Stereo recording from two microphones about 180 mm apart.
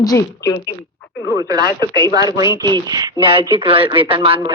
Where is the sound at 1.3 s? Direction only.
20° right (ahead or behind).